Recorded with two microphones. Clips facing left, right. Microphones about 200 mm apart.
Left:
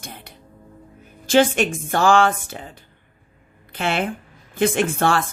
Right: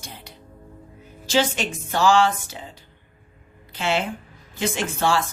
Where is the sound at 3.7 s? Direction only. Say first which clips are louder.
Left 1 dB; 55° left (ahead or behind).